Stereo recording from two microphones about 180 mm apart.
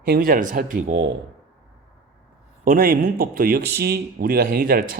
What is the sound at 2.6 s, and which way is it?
Speech, 50° right (ahead or behind).